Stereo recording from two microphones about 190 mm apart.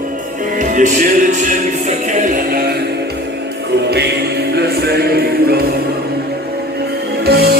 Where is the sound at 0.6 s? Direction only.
45° right (ahead or behind).